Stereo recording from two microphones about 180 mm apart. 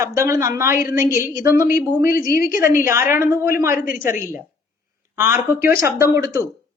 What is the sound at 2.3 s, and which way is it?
Speech, 55° left (ahead or behind).